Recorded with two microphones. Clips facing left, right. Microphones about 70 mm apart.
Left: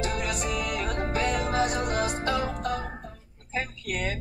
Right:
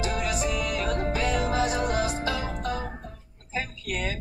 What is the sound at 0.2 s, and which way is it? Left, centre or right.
Music, left.